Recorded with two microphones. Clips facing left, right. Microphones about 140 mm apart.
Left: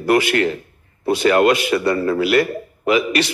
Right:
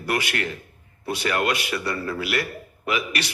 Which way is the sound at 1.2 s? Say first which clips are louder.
Left 10 dB; 90° left.